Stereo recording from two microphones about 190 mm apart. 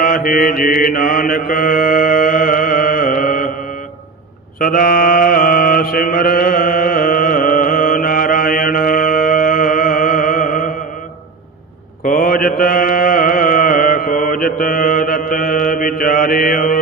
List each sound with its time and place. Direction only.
0.0 s mantra: 50° left (ahead or behind)
4.6 s mantra: 50° left (ahead or behind)
12.0 s mantra: 45° left (ahead or behind)